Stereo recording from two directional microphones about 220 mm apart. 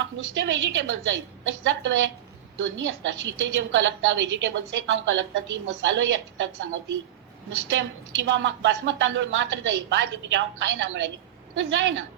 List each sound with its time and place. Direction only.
0.0 s a woman's voice: 55° right (ahead or behind)
7.7 s a woman's voice: 55° right (ahead or behind)